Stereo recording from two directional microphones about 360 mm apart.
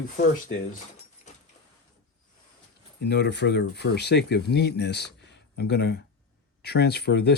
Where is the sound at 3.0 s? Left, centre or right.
Left.